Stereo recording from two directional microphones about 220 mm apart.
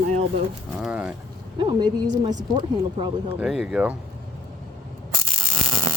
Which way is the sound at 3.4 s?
Centre (ahead or behind).